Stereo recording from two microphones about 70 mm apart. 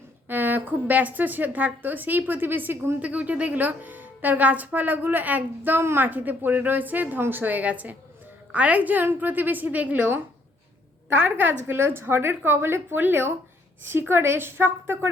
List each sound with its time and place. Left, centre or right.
0.3 s a woman's voice: right
3.0 s a woman's voice: right
5.8 s a woman's voice: right
6.1 s a woman's voice: right